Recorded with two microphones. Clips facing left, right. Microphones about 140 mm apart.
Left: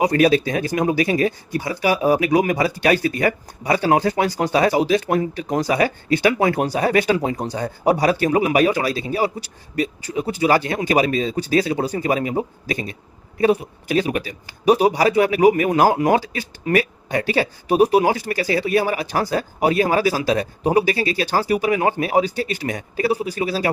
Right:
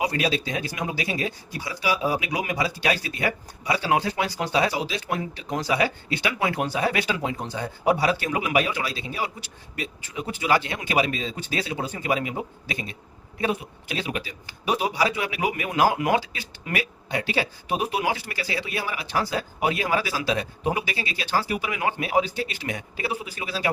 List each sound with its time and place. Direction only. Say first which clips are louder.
0.0 s speech: left 9 dB; 50° left (ahead or behind)